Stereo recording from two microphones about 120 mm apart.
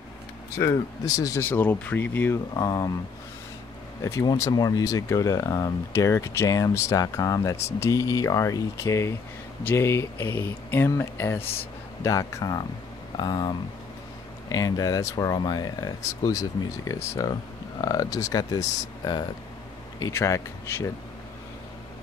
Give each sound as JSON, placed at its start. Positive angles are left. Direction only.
{"t": 0.6, "sound": "speech", "side_deg": 30}
{"t": 1.4, "sound": "speech", "side_deg": 15}
{"t": 2.5, "sound": "speech", "side_deg": 30}
{"t": 4.0, "sound": "speech", "side_deg": 25}
{"t": 20.1, "sound": "speech", "side_deg": 25}